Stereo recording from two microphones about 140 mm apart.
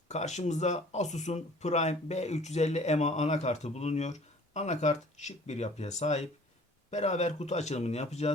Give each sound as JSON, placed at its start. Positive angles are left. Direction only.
{"t": 0.1, "sound": "speech", "side_deg": 55}